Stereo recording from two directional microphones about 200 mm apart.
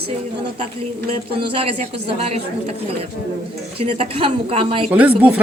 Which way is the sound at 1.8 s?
30° right (ahead or behind).